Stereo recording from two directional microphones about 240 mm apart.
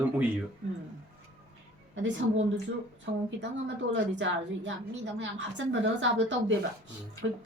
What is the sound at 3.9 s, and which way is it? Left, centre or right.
A woman's voice, right.